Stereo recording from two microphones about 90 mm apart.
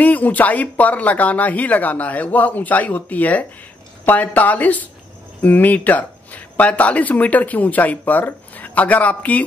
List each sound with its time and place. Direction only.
0.0 s speech: 20° left (ahead or behind)